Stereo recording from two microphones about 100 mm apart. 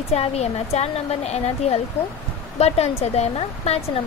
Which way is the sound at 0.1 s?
85° left.